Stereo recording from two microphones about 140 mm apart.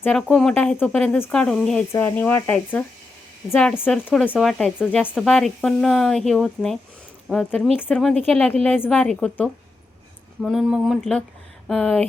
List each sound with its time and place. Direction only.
0.0 s speech: 10° left (ahead or behind)
1.9 s speech: 15° left (ahead or behind); by 7.9 s 5° right (ahead or behind)
8.3 s speech: 5° left (ahead or behind)